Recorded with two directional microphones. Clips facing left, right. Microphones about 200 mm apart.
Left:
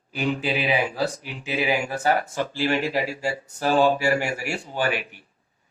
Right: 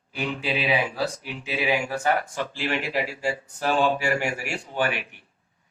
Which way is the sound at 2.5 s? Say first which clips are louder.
Left 4 dB; 35° left (ahead or behind).